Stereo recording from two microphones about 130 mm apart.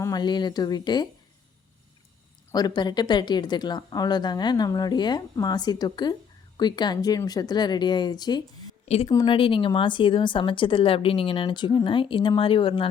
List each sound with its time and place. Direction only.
0.0 s speech: 30° left (ahead or behind)
2.5 s speech: 30° left (ahead or behind)